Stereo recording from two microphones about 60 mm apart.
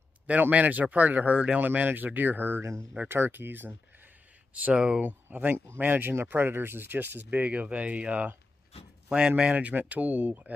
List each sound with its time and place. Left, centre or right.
0.3 s speech: right
1.6 s speech: right
4.7 s speech: centre
5.0 s speech: right